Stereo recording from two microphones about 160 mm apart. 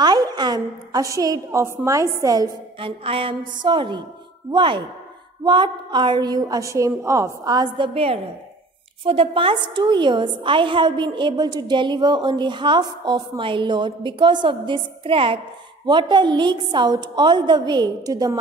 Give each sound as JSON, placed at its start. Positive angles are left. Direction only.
{"t": 0.0, "sound": "a woman's voice", "side_deg": -25}
{"t": 3.0, "sound": "a woman's voice", "side_deg": -35}